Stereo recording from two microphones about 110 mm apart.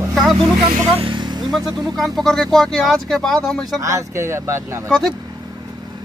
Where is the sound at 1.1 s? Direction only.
40° right (ahead or behind).